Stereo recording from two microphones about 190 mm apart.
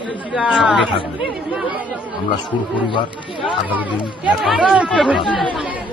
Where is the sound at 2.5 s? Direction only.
25° left (ahead or behind).